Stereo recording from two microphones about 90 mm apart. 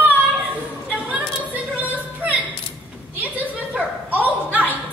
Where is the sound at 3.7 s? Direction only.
15° right (ahead or behind).